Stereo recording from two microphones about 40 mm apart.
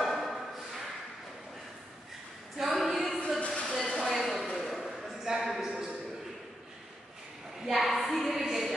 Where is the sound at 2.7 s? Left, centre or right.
Centre.